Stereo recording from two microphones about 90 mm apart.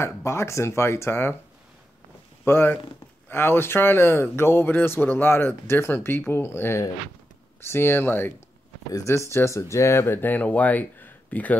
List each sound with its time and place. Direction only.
0.0 s speech: 30° left (ahead or behind)
2.4 s speech: 25° left (ahead or behind)